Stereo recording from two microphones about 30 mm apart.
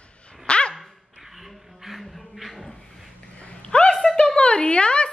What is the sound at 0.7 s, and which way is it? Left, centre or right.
Dog, centre.